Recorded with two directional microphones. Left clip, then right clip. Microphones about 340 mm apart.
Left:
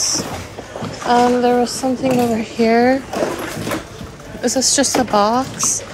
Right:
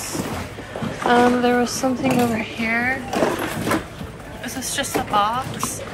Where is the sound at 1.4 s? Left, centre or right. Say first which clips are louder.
Left 3 dB; centre.